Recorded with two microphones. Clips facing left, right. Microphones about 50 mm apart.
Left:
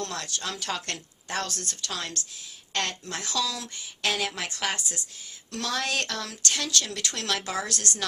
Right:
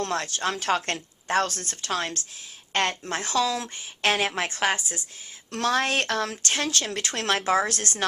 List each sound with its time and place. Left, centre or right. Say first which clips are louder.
0.0 s a woman's voice: right 6 dB; right
5.5 s speech: right 6 dB; right